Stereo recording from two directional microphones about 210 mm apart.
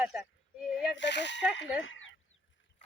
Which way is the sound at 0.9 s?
55° left (ahead or behind).